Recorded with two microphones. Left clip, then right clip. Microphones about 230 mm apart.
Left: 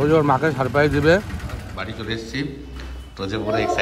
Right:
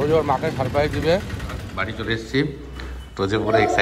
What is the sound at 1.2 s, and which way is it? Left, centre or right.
Speech, centre.